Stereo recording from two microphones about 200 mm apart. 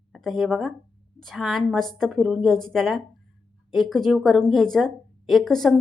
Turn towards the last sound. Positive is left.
turn(degrees=0)  # may be behind; listen again after turning